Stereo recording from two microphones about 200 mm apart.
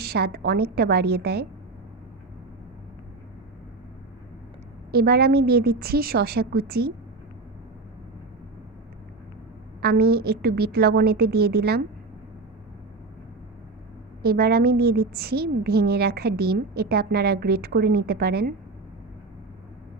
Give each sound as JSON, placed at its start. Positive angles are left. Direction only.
{"t": 0.0, "sound": "a woman's voice", "side_deg": -55}
{"t": 4.9, "sound": "a woman's voice", "side_deg": -50}
{"t": 9.8, "sound": "a woman's voice", "side_deg": -50}
{"t": 14.2, "sound": "a woman's voice", "side_deg": -50}